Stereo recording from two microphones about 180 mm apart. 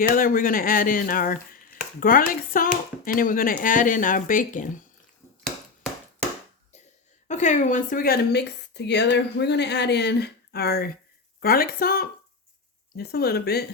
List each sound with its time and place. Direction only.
0.1 s speech: 50° left (ahead or behind)
7.3 s speech: 40° left (ahead or behind); by 13.7 s 60° left (ahead or behind)